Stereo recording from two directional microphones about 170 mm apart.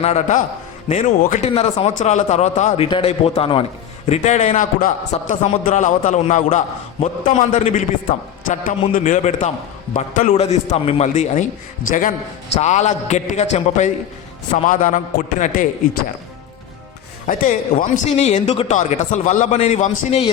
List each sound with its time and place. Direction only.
0.0 s speech: 45° left (ahead or behind)
17.2 s speech: 50° left (ahead or behind)